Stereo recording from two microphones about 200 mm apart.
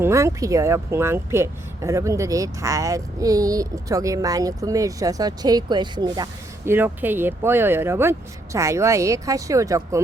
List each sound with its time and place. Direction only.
0.0 s speech: 15° right (ahead or behind)
6.7 s speech: 10° right (ahead or behind)